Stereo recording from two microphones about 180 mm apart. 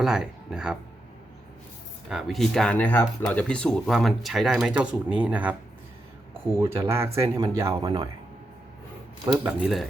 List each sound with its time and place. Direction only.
0.0 s speech: 5° right (ahead or behind)
2.0 s speech: centre (ahead or behind)
6.6 s speech: 15° right (ahead or behind)
7.7 s speech: 30° right (ahead or behind)
9.4 s speech: 5° right (ahead or behind)